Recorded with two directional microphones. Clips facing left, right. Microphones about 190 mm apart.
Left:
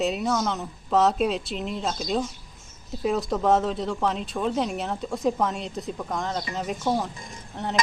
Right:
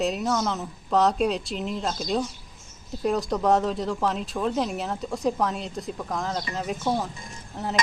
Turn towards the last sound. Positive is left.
turn(degrees=0)  # may be behind; listen again after turning